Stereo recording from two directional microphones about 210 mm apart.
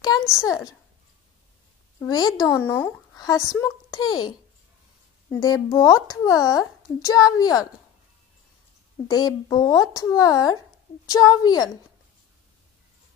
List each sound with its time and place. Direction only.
0.3 s a child's voice: 15° left (ahead or behind)
2.0 s a woman's voice: 20° left (ahead or behind)
5.3 s a child's voice: 20° left (ahead or behind)
9.0 s a child's voice: 20° left (ahead or behind)